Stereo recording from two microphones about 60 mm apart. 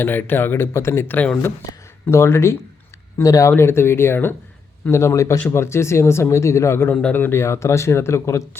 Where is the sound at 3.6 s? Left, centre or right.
Left.